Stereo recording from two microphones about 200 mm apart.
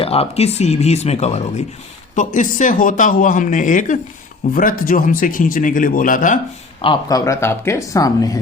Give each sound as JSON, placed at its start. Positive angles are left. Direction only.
{"t": 0.0, "sound": "speech", "side_deg": 30}
{"t": 6.8, "sound": "speech", "side_deg": 20}